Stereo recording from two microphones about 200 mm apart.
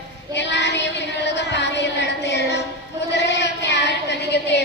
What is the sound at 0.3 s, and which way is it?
Child singing, 60° left (ahead or behind).